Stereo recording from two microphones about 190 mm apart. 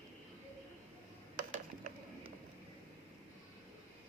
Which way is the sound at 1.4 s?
40° right (ahead or behind).